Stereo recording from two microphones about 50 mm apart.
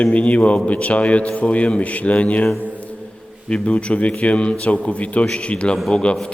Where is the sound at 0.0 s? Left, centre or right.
Left.